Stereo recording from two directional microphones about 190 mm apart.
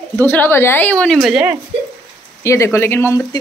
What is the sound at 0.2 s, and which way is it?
Speech, 10° left (ahead or behind).